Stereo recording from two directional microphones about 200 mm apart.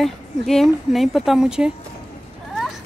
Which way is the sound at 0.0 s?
Centre (ahead or behind).